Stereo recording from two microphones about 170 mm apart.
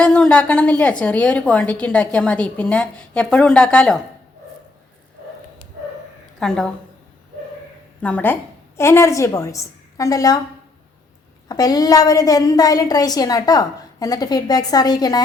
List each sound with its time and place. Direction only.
0.0 s a woman's voice: 5° left (ahead or behind)
6.4 s a woman's voice: 5° left (ahead or behind)
8.0 s a woman's voice: 10° left (ahead or behind)
11.4 s a woman's voice: 20° left (ahead or behind)